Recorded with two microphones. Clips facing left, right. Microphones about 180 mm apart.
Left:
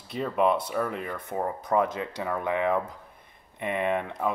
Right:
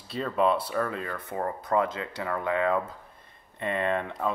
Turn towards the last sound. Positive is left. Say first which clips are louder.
# left 1 dB
turn(degrees=15)  # may be behind; listen again after turning